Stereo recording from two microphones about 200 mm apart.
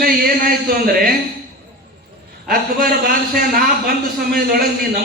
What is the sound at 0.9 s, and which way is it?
Speech, 50° right (ahead or behind).